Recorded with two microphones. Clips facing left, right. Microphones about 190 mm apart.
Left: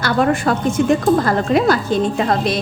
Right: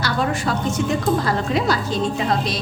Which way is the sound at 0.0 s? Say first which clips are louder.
Left 6 dB; 55° left (ahead or behind).